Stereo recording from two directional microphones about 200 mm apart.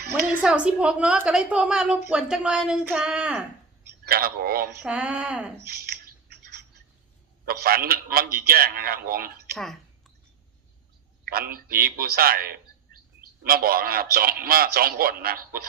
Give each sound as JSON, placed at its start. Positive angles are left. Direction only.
{"t": 0.4, "sound": "a woman's voice", "side_deg": -5}
{"t": 4.1, "sound": "a man's voice", "side_deg": -50}
{"t": 4.8, "sound": "a woman's voice", "side_deg": -5}
{"t": 5.6, "sound": "a sound", "side_deg": -50}
{"t": 7.4, "sound": "a man's voice", "side_deg": -50}
{"t": 11.3, "sound": "a man's voice", "side_deg": -50}